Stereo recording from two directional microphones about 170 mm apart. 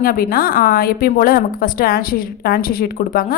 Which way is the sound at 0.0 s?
60° left (ahead or behind).